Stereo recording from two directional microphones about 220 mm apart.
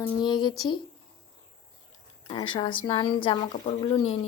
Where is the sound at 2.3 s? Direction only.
20° left (ahead or behind).